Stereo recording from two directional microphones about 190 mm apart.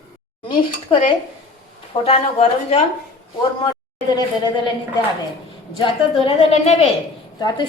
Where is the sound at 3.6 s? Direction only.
20° left (ahead or behind).